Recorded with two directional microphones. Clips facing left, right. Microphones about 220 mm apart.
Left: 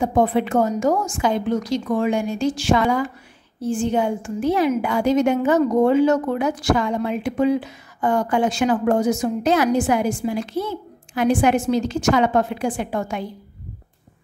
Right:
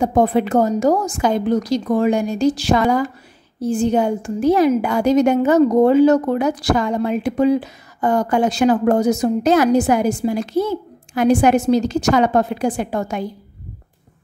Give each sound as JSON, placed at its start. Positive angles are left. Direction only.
{"t": 0.0, "sound": "a woman's voice", "side_deg": -40}